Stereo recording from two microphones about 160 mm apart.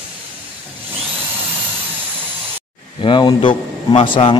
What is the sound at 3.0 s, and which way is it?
A man's voice, 30° left (ahead or behind).